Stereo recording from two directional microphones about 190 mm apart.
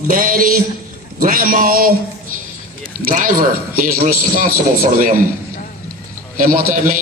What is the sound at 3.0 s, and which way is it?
Speech, 45° right (ahead or behind).